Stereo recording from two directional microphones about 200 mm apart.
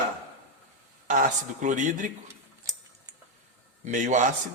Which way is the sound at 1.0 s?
40° right (ahead or behind).